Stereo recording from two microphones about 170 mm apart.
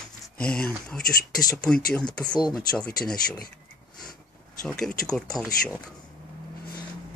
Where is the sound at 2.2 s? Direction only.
25° left (ahead or behind).